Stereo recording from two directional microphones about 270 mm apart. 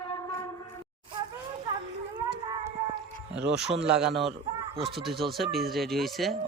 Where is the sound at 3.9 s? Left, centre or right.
Centre.